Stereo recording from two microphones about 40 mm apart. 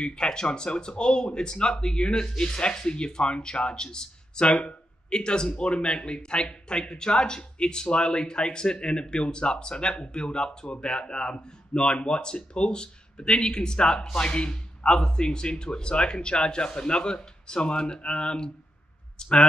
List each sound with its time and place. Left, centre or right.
0.0 s speech: left